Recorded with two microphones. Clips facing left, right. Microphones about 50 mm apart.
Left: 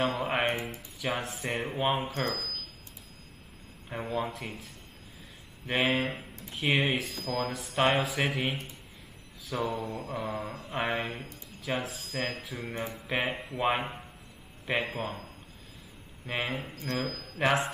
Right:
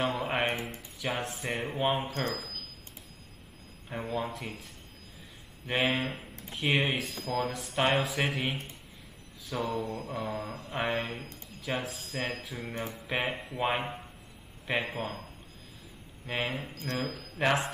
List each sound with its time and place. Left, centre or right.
0.2 s music: centre
0.7 s speech: centre
4.1 s speech: centre
5.7 s speech: centre
9.9 s mantra: centre
11.6 s speech: centre
16.3 s speech: centre
16.5 s mantra: centre
17.2 s speech: centre